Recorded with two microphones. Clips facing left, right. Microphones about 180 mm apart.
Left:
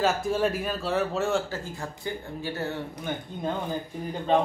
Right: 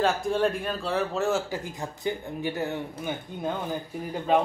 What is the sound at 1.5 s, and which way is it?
Speech, 15° right (ahead or behind).